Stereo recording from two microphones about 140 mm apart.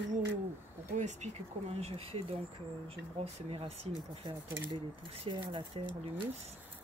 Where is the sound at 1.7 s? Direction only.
45° right (ahead or behind).